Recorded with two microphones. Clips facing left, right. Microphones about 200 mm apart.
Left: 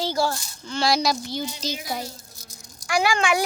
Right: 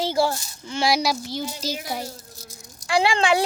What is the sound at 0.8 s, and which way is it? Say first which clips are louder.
Speech: even; 10° right (ahead or behind).